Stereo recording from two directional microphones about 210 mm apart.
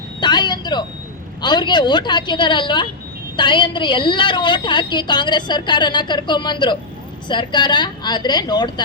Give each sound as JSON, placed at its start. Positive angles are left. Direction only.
{"t": 0.2, "sound": "a woman's voice", "side_deg": 20}